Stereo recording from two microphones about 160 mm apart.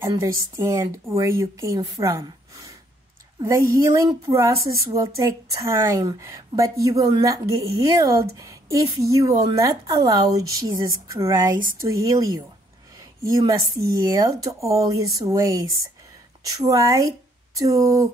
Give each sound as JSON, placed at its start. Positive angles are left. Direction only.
{"t": 0.0, "sound": "a woman's voice", "side_deg": -20}
{"t": 13.5, "sound": "a woman's voice", "side_deg": -20}